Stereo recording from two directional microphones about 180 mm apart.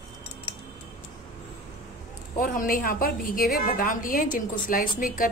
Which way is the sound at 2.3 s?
50° left (ahead or behind).